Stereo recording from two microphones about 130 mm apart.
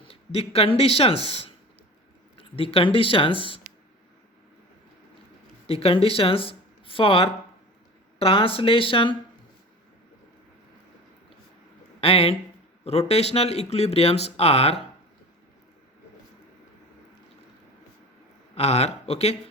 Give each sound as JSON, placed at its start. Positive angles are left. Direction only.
{"t": 0.1, "sound": "speech", "side_deg": 45}
{"t": 5.6, "sound": "speech", "side_deg": 45}
{"t": 11.9, "sound": "speech", "side_deg": 45}
{"t": 18.5, "sound": "speech", "side_deg": 55}